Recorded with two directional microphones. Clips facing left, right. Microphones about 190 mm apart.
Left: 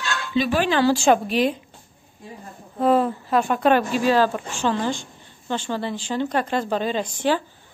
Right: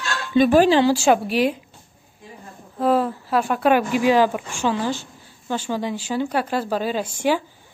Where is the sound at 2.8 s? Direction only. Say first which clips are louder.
Left 1 dB; centre (ahead or behind).